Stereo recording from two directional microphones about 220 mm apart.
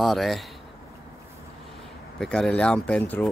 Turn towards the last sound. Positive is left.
turn(degrees=5)  # may be behind; listen again after turning